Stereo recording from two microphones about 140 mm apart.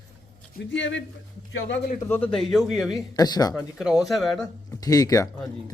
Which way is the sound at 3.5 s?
5° right (ahead or behind).